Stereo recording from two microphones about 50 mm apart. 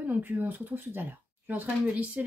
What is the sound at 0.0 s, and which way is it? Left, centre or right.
Speech, right.